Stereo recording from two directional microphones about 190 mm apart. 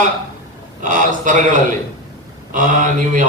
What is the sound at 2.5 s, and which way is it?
Speech, 45° right (ahead or behind).